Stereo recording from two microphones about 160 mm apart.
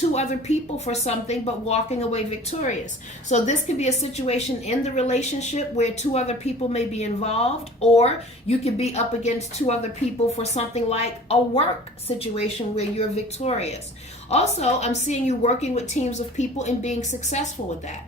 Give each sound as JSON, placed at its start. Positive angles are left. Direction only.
{"t": 0.1, "sound": "a woman's voice", "side_deg": 45}